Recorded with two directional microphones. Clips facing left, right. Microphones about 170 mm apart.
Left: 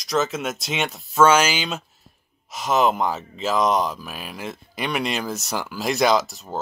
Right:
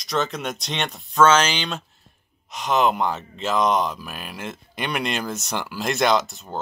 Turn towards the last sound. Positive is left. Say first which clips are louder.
# left 1 dB
turn(degrees=0)  # may be behind; listen again after turning